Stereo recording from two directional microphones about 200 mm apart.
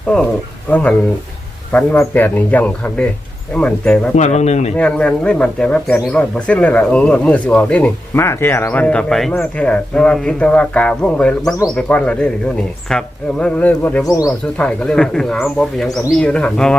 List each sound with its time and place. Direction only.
0.7 s speech: 5° left (ahead or behind)
4.2 s speech: 35° left (ahead or behind)
4.8 s speech: 5° left (ahead or behind)
14.3 s speech: 5° left (ahead or behind)